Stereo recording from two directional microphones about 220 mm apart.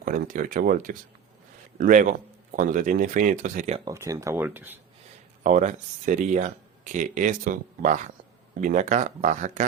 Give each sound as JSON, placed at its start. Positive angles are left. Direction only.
{"t": 0.0, "sound": "speech", "side_deg": -40}
{"t": 3.8, "sound": "speech", "side_deg": -15}
{"t": 5.4, "sound": "speech", "side_deg": -35}